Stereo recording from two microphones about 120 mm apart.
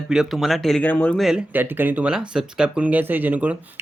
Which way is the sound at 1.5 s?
15° right (ahead or behind).